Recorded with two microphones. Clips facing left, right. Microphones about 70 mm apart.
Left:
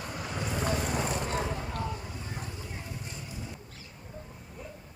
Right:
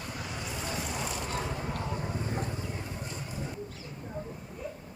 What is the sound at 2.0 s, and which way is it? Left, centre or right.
Vehicle, right.